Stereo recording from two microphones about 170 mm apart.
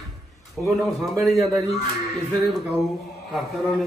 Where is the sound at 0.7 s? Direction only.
Centre (ahead or behind).